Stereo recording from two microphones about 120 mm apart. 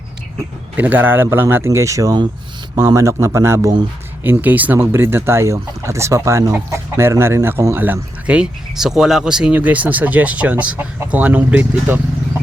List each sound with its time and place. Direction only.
0.8 s speech: 15° right (ahead or behind)